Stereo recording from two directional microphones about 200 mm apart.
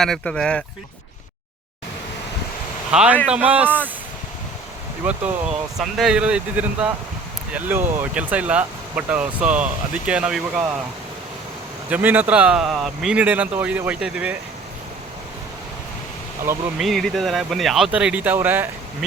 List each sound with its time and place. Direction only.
0.0 s speech: 5° left (ahead or behind)
2.9 s speech: 5° right (ahead or behind)
5.7 s speech: centre (ahead or behind)
11.9 s speech: 10° right (ahead or behind)
16.5 s speech: centre (ahead or behind)